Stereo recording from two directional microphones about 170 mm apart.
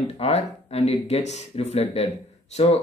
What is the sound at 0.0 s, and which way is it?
Speech, 35° left (ahead or behind).